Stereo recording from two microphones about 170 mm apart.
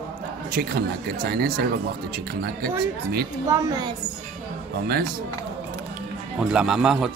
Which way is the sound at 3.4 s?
20° right (ahead or behind).